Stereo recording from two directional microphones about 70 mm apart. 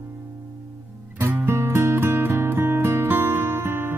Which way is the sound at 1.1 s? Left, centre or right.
Right.